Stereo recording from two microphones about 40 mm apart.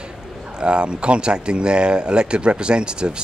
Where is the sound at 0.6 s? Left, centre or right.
Right.